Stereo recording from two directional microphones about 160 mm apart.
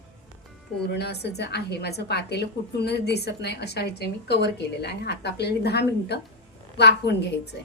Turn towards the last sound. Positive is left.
turn(degrees=90)